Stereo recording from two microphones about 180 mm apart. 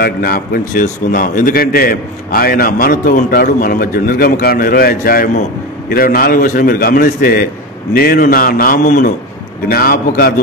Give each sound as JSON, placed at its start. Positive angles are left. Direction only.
{"t": 0.0, "sound": "a man's voice", "side_deg": 55}
{"t": 9.7, "sound": "a man's voice", "side_deg": 55}